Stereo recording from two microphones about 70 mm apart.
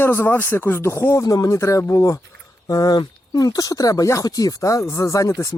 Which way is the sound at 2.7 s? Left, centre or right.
Left.